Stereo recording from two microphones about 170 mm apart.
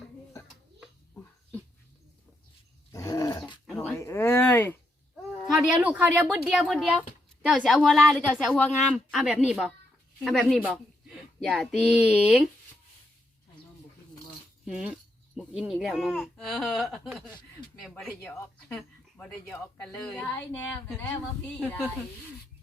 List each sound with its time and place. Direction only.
2.9 s dog: 20° left (ahead or behind)
3.8 s a sound: 15° left (ahead or behind)
5.5 s speech: 5° right (ahead or behind)
14.6 s speech: 5° right (ahead or behind)
18.2 s speech: 15° left (ahead or behind)
18.7 s speech: 5° left (ahead or behind)